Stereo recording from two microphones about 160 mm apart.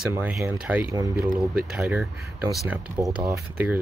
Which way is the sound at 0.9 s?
20° right (ahead or behind).